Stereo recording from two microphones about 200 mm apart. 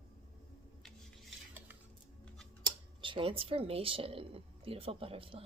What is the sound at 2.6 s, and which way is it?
Speech, 25° right (ahead or behind).